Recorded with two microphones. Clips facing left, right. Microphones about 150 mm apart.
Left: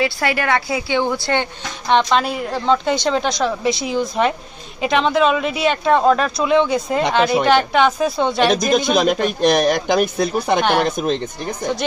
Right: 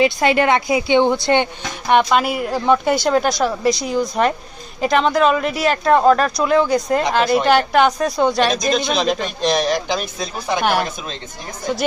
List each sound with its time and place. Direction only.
0.0 s speech: 20° right (ahead or behind)
1.9 s speech: 10° right (ahead or behind)
9.0 s speech: 55° left (ahead or behind)